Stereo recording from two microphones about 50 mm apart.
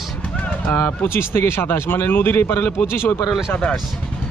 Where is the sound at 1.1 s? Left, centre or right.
Left.